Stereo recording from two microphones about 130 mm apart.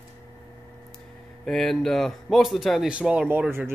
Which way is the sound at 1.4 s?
5° left (ahead or behind).